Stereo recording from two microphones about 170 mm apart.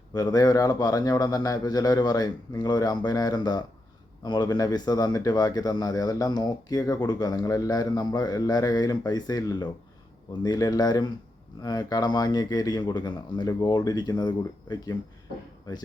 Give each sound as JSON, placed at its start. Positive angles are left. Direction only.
{"t": 0.1, "sound": "speech", "side_deg": 25}